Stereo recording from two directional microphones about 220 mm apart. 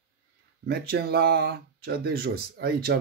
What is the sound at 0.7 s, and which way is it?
Speech, 45° right (ahead or behind).